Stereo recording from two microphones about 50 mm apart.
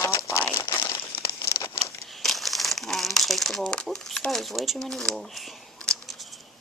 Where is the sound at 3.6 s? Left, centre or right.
Centre.